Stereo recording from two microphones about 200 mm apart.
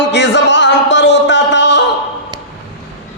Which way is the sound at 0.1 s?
60° left (ahead or behind).